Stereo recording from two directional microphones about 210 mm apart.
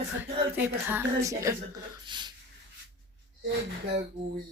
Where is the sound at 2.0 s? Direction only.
20° right (ahead or behind).